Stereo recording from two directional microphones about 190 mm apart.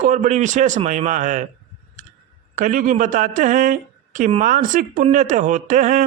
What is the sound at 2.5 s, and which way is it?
A woman's voice, 45° right (ahead or behind).